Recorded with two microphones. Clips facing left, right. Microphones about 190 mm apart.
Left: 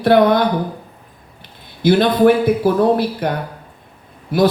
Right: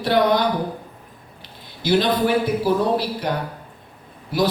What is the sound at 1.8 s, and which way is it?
Mantra, 55° left (ahead or behind).